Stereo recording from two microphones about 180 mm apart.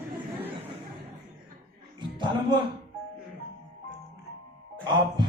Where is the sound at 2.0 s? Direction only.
25° right (ahead or behind).